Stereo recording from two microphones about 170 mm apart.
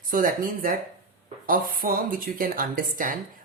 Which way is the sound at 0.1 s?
55° right (ahead or behind).